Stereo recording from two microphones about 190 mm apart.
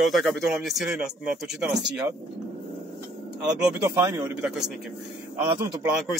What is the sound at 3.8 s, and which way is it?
Speech, 15° right (ahead or behind).